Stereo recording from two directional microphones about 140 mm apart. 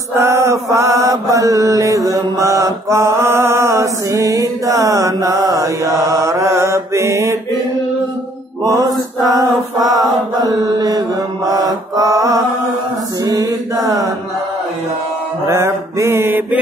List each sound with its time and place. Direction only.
0.2 s mantra: 20° right (ahead or behind)
8.6 s chant: 25° right (ahead or behind)
13.2 s mantra: 25° right (ahead or behind)
15.4 s mantra: 20° right (ahead or behind)